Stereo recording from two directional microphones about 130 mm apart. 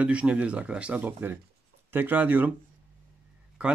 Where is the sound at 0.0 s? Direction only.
10° right (ahead or behind).